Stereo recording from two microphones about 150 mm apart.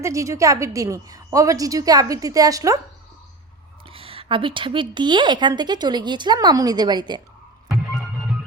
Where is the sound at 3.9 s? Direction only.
40° right (ahead or behind).